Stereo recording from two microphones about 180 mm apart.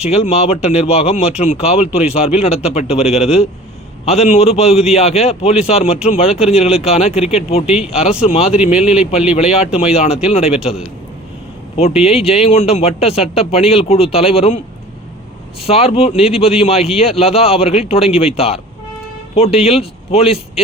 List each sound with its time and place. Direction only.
0.0 s a man's voice: 35° left (ahead or behind)
8.8 s a man's voice: 5° right (ahead or behind)
9.3 s a man's voice: 35° left (ahead or behind)
11.8 s a man's voice: 35° left (ahead or behind)
15.6 s a man's voice: 35° left (ahead or behind)